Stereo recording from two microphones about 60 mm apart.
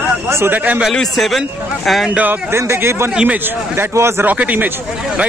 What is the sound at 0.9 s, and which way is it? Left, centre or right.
A man's voice, centre.